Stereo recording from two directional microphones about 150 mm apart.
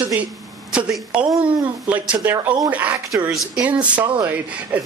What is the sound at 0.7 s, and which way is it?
Speech, 5° right (ahead or behind).